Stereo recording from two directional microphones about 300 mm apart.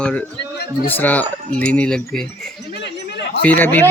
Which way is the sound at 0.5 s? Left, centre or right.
Left.